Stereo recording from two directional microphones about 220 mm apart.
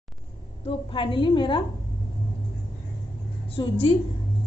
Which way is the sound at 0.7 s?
25° left (ahead or behind).